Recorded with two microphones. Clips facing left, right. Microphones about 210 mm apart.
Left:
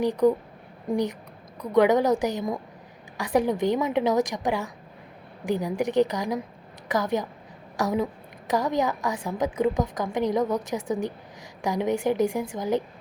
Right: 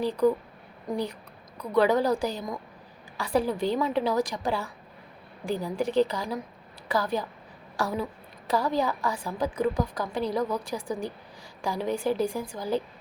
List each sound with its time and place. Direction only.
0.0 s a woman's voice: 20° left (ahead or behind)